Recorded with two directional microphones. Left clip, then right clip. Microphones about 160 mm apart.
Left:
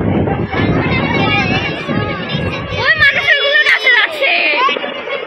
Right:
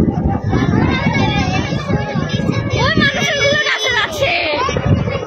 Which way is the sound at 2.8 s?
35° right (ahead or behind).